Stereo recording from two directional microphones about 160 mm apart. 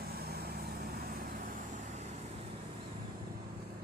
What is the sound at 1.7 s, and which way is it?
Vehicle, 45° right (ahead or behind).